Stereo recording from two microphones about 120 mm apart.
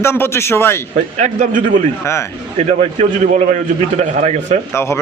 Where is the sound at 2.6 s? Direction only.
60° right (ahead or behind).